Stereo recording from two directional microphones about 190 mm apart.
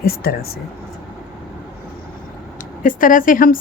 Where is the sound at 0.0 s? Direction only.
50° left (ahead or behind).